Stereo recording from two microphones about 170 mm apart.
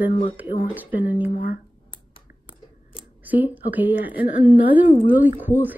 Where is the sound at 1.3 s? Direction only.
55° left (ahead or behind).